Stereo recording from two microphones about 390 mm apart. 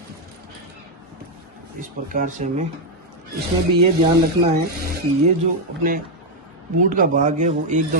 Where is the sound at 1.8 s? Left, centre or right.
Centre.